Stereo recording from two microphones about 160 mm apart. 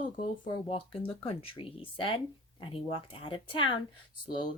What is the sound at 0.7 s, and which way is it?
A woman's voice, 35° left (ahead or behind).